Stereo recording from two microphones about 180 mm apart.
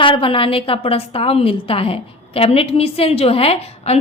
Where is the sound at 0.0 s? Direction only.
30° left (ahead or behind).